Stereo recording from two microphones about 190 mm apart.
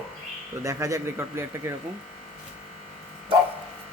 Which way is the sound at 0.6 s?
15° right (ahead or behind).